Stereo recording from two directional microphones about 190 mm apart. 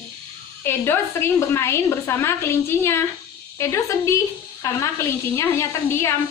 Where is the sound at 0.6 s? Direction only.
10° left (ahead or behind).